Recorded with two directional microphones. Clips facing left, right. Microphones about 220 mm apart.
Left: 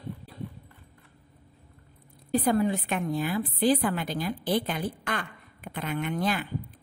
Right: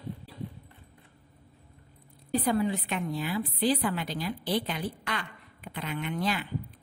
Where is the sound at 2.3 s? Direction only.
45° left (ahead or behind).